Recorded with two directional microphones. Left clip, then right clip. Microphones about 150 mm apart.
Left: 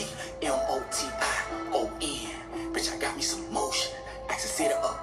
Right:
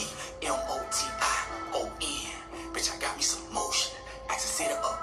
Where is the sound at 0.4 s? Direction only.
25° left (ahead or behind).